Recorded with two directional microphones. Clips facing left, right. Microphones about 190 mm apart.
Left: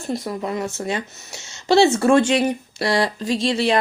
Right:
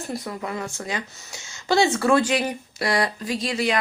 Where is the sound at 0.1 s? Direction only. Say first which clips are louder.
Left 6 dB; 20° left (ahead or behind).